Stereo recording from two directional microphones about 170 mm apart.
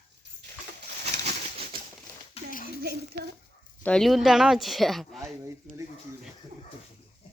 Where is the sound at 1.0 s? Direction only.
40° right (ahead or behind).